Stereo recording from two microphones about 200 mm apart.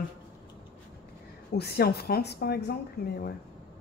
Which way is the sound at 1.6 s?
50° left (ahead or behind).